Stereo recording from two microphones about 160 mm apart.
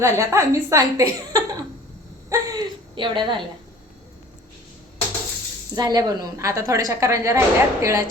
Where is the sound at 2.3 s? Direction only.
15° right (ahead or behind).